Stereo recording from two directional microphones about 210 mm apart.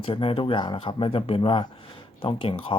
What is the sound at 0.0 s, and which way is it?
Speech, 25° left (ahead or behind).